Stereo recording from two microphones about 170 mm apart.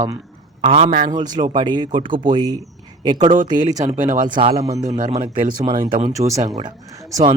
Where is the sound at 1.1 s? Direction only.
25° right (ahead or behind).